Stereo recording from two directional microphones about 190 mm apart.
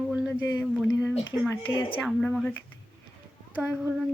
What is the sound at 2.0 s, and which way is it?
Speech, centre (ahead or behind).